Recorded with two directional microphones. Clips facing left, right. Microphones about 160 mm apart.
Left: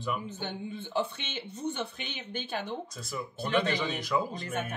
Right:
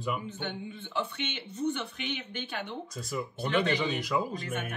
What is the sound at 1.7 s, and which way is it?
Speech, 35° left (ahead or behind).